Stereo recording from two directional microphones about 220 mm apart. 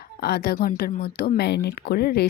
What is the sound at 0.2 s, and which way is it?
Speech, 45° left (ahead or behind).